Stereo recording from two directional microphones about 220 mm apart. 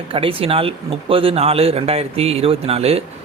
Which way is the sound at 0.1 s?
25° right (ahead or behind).